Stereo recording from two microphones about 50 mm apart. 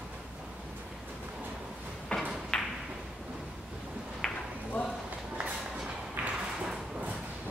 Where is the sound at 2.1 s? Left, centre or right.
Left.